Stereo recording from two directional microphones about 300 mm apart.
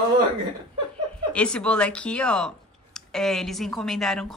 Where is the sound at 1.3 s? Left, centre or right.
Centre.